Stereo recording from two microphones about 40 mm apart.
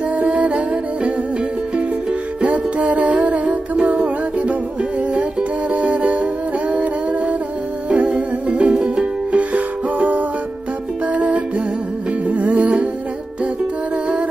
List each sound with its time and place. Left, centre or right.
0.2 s music: right
2.4 s music: right
5.7 s music: right
6.7 s humming: right
7.9 s music: right